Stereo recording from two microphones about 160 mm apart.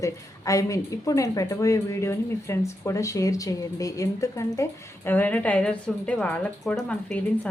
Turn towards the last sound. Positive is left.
turn(degrees=5)  # may be behind; listen again after turning